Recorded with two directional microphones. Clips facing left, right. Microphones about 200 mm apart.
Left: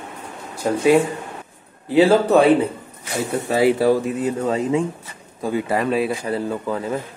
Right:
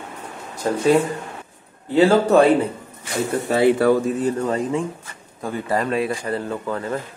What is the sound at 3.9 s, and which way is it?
Speech, 10° left (ahead or behind).